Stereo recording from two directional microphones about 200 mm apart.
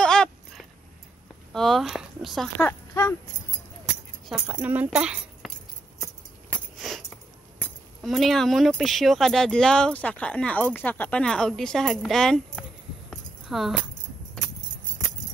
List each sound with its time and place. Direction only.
0.0 s a sound: 5° left (ahead or behind)
1.5 s speech: centre (ahead or behind)
2.9 s speech: 15° left (ahead or behind)
4.3 s speech: 5° right (ahead or behind)
6.8 s speech: centre (ahead or behind)
13.1 s a sound: centre (ahead or behind)